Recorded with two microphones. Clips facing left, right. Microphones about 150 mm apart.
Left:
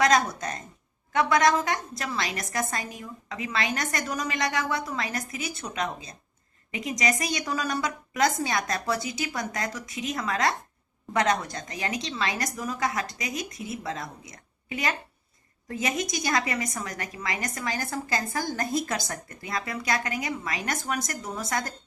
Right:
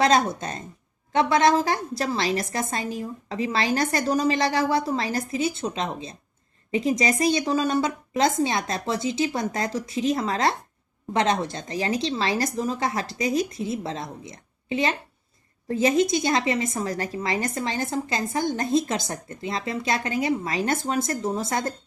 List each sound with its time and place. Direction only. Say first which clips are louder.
0.0 s a woman's voice: right 2 dB; 25° right (ahead or behind)